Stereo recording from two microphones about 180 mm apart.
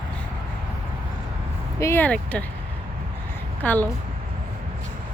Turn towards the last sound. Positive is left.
turn(degrees=10)  # may be behind; listen again after turning